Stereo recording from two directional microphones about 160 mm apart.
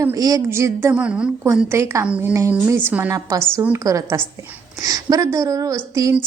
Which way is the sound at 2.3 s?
15° right (ahead or behind).